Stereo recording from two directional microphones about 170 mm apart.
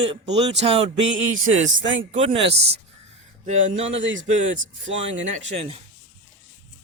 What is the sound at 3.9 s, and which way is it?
Speech, 90° right.